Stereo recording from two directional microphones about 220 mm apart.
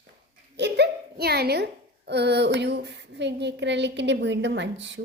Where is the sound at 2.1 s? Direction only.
50° right (ahead or behind).